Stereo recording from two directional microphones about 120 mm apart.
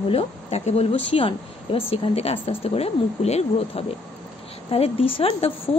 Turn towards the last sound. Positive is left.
turn(degrees=55)  # may be behind; listen again after turning